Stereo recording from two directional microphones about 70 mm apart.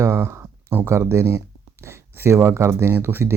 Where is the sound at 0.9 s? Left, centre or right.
Right.